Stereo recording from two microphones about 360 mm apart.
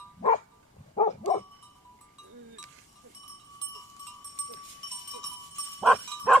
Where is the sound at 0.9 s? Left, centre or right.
Centre.